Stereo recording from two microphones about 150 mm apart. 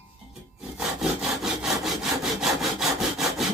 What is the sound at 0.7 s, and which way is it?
Sawing, 5° right (ahead or behind).